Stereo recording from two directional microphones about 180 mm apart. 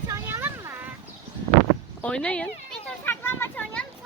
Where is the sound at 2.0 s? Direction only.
5° left (ahead or behind).